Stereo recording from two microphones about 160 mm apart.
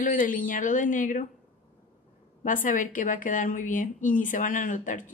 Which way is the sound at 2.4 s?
55° left (ahead or behind).